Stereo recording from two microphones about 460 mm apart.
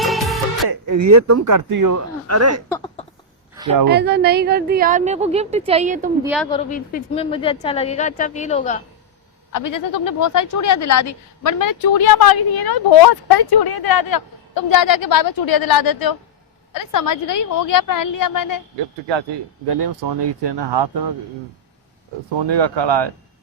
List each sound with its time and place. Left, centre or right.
0.0 s music: centre
0.7 s speech: right
2.6 s a sound: centre
3.5 s a sound: centre
3.8 s a woman's voice: right
6.2 s a woman's voice: centre
6.5 s a woman's voice: centre
9.5 s speech: left
19.6 s speech: right
22.4 s speech: right